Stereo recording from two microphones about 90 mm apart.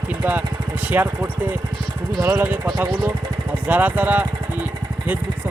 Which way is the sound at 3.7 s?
20° right (ahead or behind).